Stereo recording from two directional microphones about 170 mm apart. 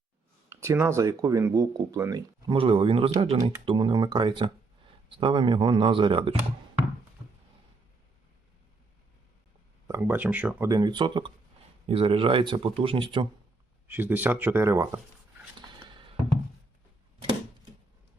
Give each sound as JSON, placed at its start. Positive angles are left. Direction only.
{"t": 0.5, "sound": "speech", "side_deg": -15}
{"t": 2.6, "sound": "speech", "side_deg": -30}
{"t": 9.8, "sound": "speech", "side_deg": -15}
{"t": 10.7, "sound": "speech", "side_deg": -25}
{"t": 13.8, "sound": "speech", "side_deg": -10}
{"t": 15.9, "sound": "music", "side_deg": -30}